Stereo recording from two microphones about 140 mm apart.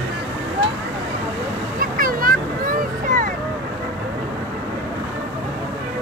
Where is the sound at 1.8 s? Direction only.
90° right; by 3.3 s 75° right (ahead or behind).